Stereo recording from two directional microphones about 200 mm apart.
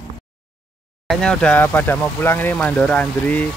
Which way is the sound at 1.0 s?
5° left (ahead or behind).